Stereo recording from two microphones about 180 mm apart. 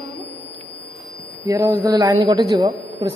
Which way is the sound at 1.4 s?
20° right (ahead or behind).